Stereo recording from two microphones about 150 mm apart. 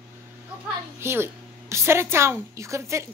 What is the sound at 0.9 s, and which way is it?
A woman's voice, 15° right (ahead or behind).